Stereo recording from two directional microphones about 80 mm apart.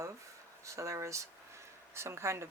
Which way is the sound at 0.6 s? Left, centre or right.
Right.